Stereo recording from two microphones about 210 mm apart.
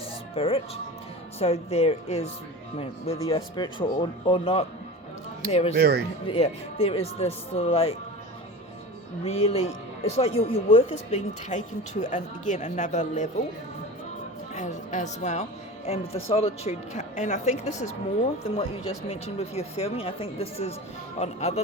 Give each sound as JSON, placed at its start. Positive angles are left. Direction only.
{"t": 0.3, "sound": "speech", "side_deg": 25}
{"t": 5.7, "sound": "speech", "side_deg": -50}
{"t": 6.2, "sound": "speech", "side_deg": 25}
{"t": 9.2, "sound": "speech", "side_deg": 30}
{"t": 14.5, "sound": "speech", "side_deg": 35}